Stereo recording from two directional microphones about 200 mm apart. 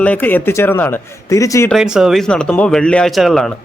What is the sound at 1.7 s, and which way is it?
A man's voice, centre (ahead or behind).